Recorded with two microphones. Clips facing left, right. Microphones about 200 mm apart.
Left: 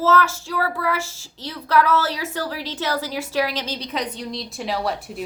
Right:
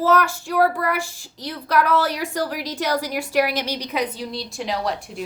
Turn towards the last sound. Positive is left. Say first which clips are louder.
# even
turn(degrees=0)  # may be behind; listen again after turning